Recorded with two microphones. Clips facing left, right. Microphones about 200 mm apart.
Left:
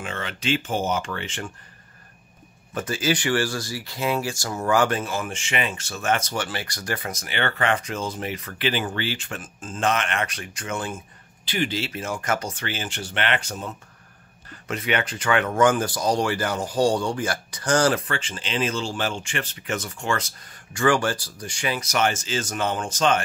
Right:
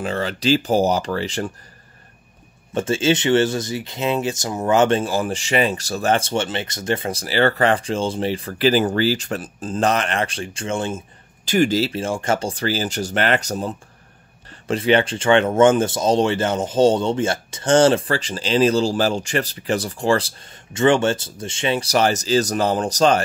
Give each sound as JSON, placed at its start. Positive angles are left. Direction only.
{"t": 0.0, "sound": "speech", "side_deg": -35}
{"t": 2.7, "sound": "speech", "side_deg": -25}
{"t": 11.4, "sound": "speech", "side_deg": -45}